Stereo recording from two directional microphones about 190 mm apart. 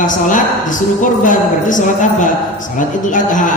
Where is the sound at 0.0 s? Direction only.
45° left (ahead or behind).